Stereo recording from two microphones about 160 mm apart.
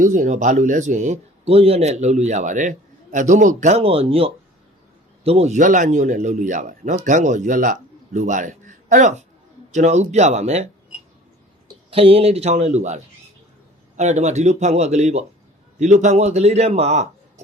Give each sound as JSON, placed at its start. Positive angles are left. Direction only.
{"t": 0.0, "sound": "a man's voice", "side_deg": -55}
{"t": 11.9, "sound": "a man's voice", "side_deg": -35}